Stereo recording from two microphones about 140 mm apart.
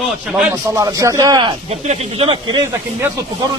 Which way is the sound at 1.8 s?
45° right (ahead or behind).